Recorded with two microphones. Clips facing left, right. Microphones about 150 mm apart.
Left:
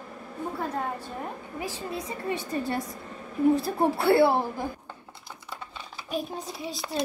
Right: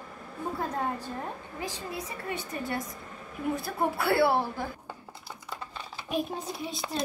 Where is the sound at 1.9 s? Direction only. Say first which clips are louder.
Left 4 dB; 25° left (ahead or behind).